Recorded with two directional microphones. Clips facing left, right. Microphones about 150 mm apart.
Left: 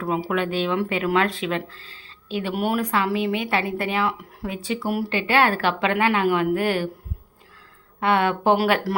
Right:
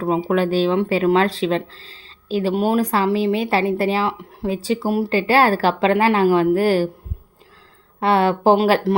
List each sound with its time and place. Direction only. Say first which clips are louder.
0.0 s speech: right 5 dB; 30° right (ahead or behind)
7.9 s speech: right 4 dB; 30° right (ahead or behind)